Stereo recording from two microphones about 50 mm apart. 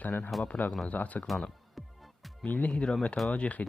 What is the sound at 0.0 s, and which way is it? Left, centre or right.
Speech, left.